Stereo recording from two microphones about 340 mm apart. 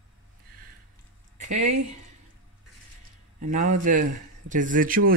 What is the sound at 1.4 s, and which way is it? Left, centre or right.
Speech, right.